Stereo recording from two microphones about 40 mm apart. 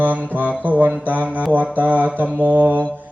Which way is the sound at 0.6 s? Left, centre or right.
Right.